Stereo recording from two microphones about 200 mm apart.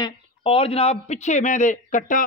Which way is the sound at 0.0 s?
25° left (ahead or behind).